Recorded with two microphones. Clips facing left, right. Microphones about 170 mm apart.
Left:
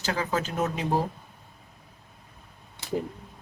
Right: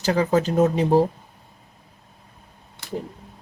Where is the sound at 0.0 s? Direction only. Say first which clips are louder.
Right 9 dB; 40° right (ahead or behind).